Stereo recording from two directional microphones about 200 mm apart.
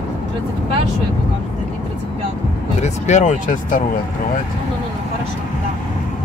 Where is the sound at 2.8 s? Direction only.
35° left (ahead or behind).